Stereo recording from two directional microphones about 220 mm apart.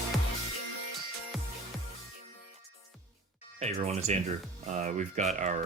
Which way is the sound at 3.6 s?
30° right (ahead or behind).